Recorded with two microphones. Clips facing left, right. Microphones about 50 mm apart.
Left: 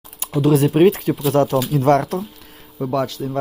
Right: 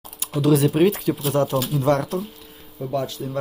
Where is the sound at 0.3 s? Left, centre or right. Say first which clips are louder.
Left 3 dB; left.